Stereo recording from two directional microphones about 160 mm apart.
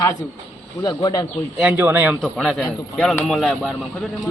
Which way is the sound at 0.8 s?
25° left (ahead or behind).